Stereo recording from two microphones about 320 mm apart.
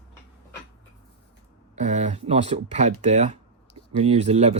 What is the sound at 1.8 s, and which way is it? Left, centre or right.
Speech, right.